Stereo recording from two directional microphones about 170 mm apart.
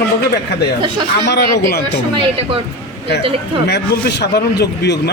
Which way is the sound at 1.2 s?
75° left (ahead or behind).